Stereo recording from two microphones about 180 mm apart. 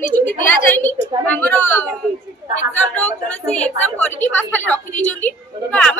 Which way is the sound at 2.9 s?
5° left (ahead or behind).